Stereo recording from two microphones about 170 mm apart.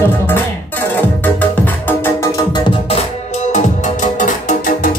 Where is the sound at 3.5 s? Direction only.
45° left (ahead or behind).